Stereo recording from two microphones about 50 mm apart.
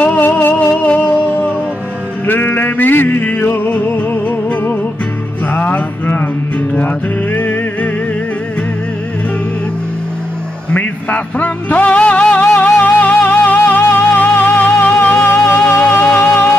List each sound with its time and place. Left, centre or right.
0.0 s music: left
2.2 s a sound: left
3.5 s music: left
7.3 s music: left
10.7 s music: left
12.5 s music: left